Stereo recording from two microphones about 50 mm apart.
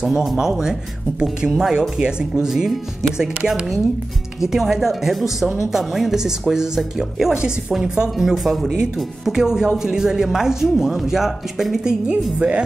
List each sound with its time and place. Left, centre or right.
0.0 s speech: centre
12.1 s a woman's voice: right